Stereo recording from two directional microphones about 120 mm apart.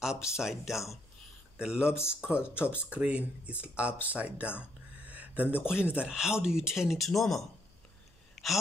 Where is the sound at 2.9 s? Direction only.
10° right (ahead or behind).